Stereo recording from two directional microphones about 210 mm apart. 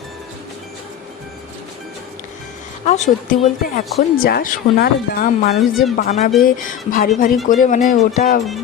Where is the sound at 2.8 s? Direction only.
35° left (ahead or behind).